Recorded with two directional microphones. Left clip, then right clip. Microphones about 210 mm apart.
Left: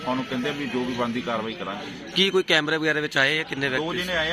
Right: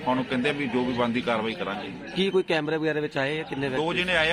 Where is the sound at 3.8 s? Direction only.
25° right (ahead or behind).